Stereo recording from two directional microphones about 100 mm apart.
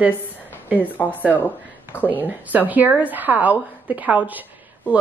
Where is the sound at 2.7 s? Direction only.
15° right (ahead or behind).